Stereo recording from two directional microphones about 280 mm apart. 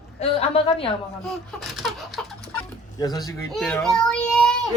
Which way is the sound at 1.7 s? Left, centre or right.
Centre.